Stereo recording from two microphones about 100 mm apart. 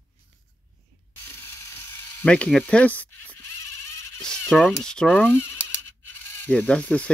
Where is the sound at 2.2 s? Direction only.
10° left (ahead or behind).